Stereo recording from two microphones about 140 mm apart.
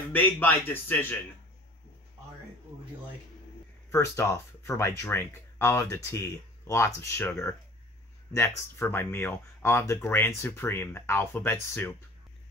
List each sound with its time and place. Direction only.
0.1 s speech: 15° left (ahead or behind)
3.9 s speech: 20° left (ahead or behind)